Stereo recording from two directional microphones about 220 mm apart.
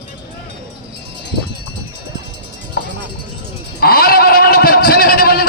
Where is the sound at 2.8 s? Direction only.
45° left (ahead or behind).